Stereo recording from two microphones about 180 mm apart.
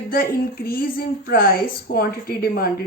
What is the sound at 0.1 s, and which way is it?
A woman's voice, 55° left (ahead or behind).